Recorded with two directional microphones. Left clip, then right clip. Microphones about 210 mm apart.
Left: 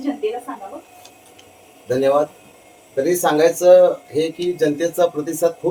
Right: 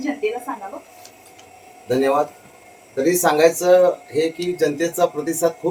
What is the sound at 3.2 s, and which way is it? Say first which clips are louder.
Speech: left 2 dB; centre (ahead or behind).